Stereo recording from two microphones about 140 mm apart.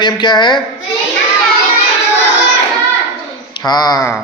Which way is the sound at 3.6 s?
30° left (ahead or behind).